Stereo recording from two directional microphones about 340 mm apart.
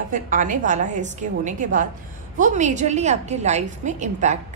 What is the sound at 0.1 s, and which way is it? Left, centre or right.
A woman's voice, right.